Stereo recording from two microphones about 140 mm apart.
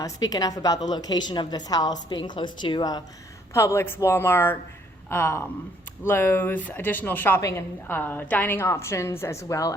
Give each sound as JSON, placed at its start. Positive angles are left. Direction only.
{"t": 0.0, "sound": "a woman's voice", "side_deg": 25}
{"t": 3.5, "sound": "a woman's voice", "side_deg": 20}